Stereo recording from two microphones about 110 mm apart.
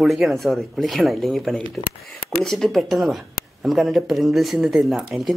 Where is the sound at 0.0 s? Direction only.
Centre (ahead or behind).